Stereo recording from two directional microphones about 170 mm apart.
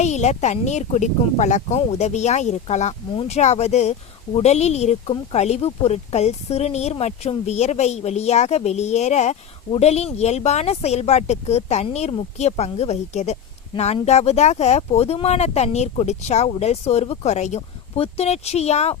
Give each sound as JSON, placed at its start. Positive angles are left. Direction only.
{"t": 0.0, "sound": "speech", "side_deg": 45}